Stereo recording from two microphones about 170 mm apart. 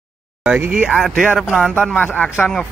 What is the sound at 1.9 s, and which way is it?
Speech, 10° left (ahead or behind).